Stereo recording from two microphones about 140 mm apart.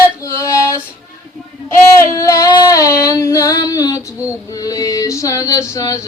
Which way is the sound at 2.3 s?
25° left (ahead or behind).